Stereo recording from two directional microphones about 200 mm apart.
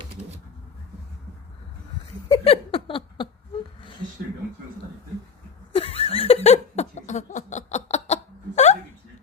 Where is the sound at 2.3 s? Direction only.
30° left (ahead or behind).